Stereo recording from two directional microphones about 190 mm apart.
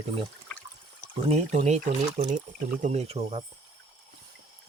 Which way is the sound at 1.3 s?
35° right (ahead or behind).